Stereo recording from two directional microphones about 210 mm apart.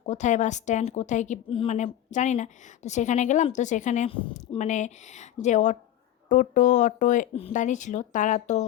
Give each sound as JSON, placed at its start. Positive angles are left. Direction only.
{"t": 0.0, "sound": "speech", "side_deg": 35}